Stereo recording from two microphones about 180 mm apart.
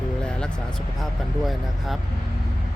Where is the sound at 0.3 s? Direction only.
5° left (ahead or behind).